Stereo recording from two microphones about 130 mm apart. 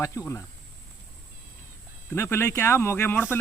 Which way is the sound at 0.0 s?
25° left (ahead or behind).